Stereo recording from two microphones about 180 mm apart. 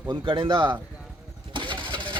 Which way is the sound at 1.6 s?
25° right (ahead or behind).